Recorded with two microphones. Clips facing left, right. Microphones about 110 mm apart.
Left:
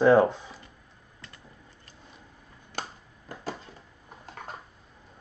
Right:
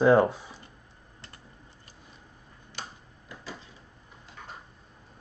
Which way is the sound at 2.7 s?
45° left (ahead or behind).